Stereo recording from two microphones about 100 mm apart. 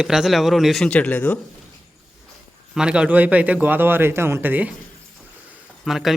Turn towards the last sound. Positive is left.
turn(degrees=-5)  # may be behind; listen again after turning